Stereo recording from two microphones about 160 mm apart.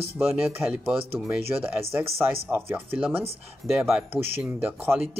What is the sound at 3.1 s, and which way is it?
Speech, 40° right (ahead or behind).